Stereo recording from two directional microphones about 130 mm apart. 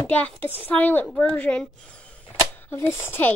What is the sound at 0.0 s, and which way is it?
Speech, 10° left (ahead or behind).